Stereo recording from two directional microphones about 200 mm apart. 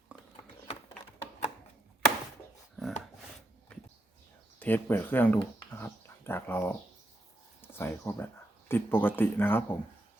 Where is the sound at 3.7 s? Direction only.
5° left (ahead or behind).